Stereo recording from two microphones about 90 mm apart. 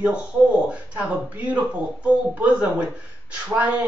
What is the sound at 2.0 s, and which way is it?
Speech, 15° right (ahead or behind).